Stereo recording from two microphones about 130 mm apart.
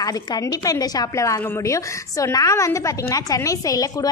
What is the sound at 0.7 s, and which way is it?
A woman's voice, 30° left (ahead or behind).